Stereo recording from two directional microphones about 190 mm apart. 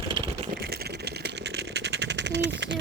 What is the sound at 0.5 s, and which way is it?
Rattle, 55° right (ahead or behind).